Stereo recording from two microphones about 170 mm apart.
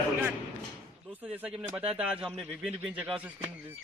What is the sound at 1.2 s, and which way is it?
Speech, 10° right (ahead or behind).